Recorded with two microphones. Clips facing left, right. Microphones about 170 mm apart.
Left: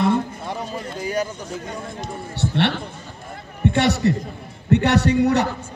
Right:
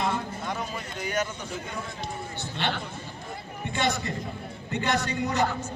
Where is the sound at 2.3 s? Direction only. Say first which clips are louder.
Left 11 dB; 75° left (ahead or behind).